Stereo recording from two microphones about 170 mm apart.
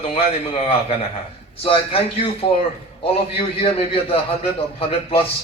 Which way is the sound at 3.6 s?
35° left (ahead or behind).